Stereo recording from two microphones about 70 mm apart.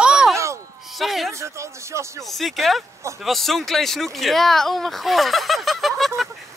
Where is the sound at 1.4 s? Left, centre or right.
Right.